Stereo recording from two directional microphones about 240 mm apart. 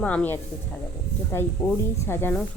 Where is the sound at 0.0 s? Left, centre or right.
Centre.